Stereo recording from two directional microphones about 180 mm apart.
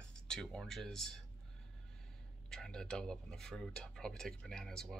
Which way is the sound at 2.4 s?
5° left (ahead or behind).